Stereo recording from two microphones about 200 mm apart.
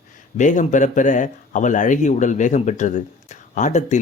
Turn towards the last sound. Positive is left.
turn(degrees=35)  # may be behind; listen again after turning